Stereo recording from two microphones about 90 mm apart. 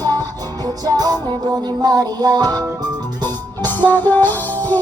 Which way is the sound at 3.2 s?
20° left (ahead or behind).